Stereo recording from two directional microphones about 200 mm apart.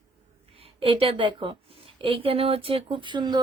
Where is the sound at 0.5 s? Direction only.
25° right (ahead or behind).